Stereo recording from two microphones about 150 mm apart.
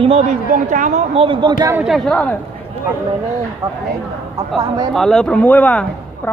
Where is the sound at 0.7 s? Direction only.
55° right (ahead or behind).